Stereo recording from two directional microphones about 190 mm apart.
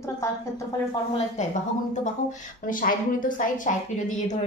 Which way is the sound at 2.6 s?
45° left (ahead or behind).